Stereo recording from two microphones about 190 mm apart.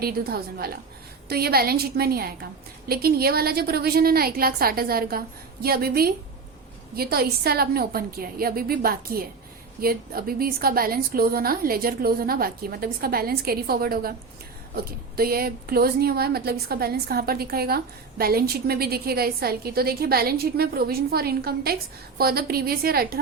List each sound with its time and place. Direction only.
0.0 s a woman's voice: 55° right (ahead or behind)